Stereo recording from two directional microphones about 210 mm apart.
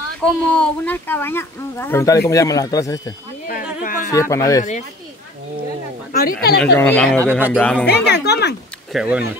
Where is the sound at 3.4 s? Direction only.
40° left (ahead or behind).